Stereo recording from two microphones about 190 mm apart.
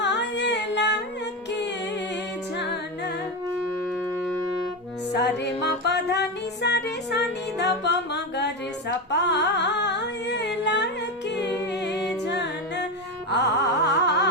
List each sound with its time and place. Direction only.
0.0 s music: 65° left (ahead or behind)
5.1 s music: 65° left (ahead or behind)
9.0 s a sound: 65° left (ahead or behind)
11.3 s a capella: 65° left (ahead or behind)
12.4 s music: 65° left (ahead or behind)